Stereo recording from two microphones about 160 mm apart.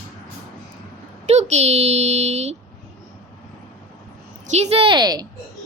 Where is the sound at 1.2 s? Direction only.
45° right (ahead or behind).